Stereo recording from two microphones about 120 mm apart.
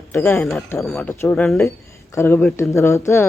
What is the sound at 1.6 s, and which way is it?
Speech, 25° left (ahead or behind).